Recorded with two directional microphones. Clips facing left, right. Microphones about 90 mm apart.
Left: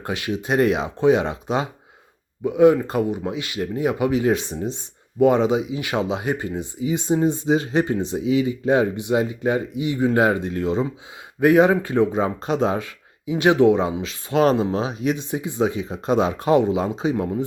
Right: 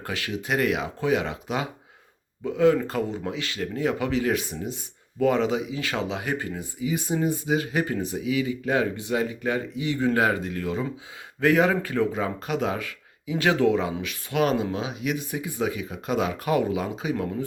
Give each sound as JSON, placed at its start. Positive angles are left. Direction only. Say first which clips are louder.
{"t": 0.0, "sound": "speech", "louder": "left 5 dB", "side_deg": 20}